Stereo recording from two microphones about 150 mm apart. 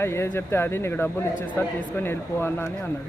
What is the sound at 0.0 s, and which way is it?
Speech, 15° left (ahead or behind).